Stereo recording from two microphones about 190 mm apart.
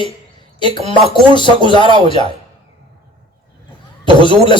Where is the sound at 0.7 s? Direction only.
30° right (ahead or behind).